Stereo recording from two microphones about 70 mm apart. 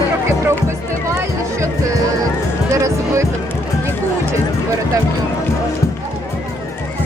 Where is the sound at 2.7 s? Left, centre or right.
Right.